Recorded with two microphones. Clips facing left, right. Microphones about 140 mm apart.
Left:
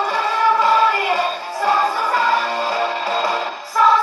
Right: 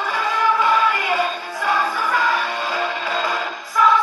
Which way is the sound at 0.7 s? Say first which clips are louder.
Left 3 dB; 35° left (ahead or behind).